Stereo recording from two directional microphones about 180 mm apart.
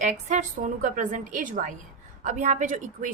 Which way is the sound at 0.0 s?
40° right (ahead or behind).